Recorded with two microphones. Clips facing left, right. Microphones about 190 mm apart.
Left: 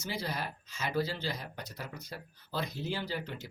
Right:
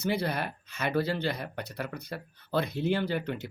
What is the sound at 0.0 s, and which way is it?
Speech, 60° right (ahead or behind).